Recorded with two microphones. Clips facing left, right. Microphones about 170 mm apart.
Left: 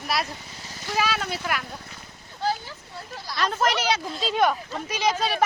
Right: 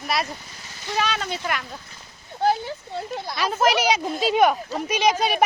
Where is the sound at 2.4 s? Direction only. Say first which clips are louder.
Right 6 dB; 60° right (ahead or behind).